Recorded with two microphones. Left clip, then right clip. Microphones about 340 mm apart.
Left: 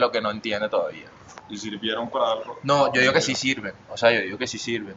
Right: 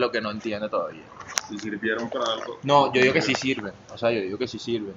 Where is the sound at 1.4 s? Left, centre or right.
Right.